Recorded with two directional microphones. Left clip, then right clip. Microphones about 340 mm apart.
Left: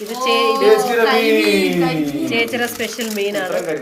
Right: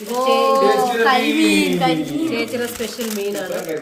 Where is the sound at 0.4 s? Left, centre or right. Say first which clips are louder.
Left 1 dB; centre.